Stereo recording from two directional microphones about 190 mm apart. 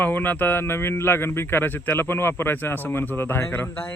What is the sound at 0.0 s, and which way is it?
A man's voice, 10° left (ahead or behind).